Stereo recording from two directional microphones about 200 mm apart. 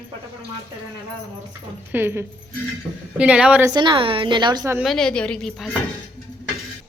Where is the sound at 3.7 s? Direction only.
25° right (ahead or behind).